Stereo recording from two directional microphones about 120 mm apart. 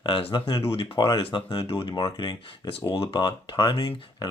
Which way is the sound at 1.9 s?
35° left (ahead or behind).